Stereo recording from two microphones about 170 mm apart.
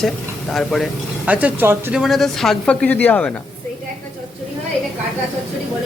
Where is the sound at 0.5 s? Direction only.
Centre (ahead or behind).